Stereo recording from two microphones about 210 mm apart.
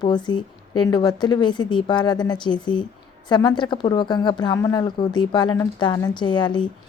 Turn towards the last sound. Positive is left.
turn(degrees=20)  # may be behind; listen again after turning